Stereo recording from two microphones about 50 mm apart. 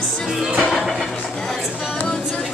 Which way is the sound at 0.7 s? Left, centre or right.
Centre.